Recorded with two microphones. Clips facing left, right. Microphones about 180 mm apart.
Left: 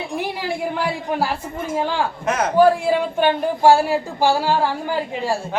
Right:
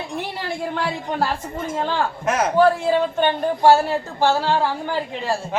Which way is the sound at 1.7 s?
10° left (ahead or behind).